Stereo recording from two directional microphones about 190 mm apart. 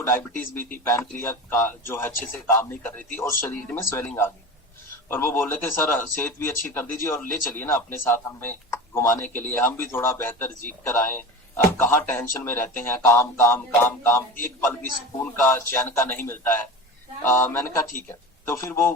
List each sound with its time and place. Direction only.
0.0 s a man's voice: 10° left (ahead or behind)
18.4 s a man's voice: 10° left (ahead or behind)